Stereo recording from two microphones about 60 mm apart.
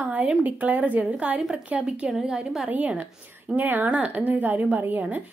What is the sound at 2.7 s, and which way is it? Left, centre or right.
A woman's voice, right.